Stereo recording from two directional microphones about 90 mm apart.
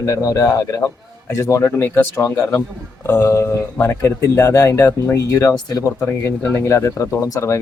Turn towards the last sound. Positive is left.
turn(degrees=35)  # may be behind; listen again after turning